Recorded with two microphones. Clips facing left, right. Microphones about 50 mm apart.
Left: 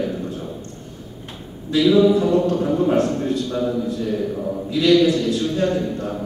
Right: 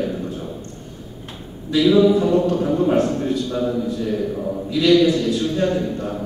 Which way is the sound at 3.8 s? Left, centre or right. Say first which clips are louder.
Even; centre.